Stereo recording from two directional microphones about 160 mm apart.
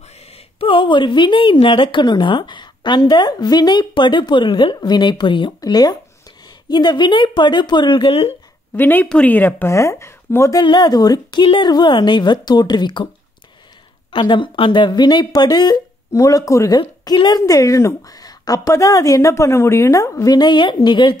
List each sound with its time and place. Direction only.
0.3 s speech: 35° left (ahead or behind)
8.7 s speech: 10° left (ahead or behind)
10.6 s speech: 25° left (ahead or behind)
14.1 s speech: 30° left (ahead or behind)